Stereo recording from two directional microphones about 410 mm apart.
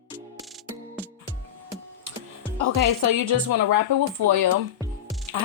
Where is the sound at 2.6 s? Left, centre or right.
Right.